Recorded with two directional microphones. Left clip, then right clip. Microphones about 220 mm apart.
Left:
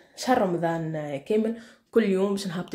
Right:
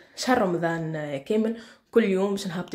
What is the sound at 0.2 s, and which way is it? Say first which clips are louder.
Speech: even; centre (ahead or behind).